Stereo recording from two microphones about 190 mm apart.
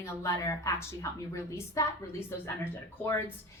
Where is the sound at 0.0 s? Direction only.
15° left (ahead or behind).